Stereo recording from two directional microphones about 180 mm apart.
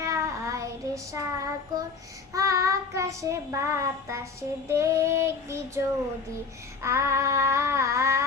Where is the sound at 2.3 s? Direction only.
15° right (ahead or behind).